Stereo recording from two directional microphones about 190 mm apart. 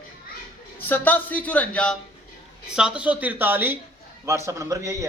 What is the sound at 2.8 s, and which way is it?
Speech, 5° right (ahead or behind).